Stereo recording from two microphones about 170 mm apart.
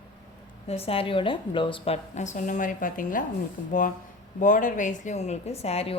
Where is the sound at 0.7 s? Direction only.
35° left (ahead or behind).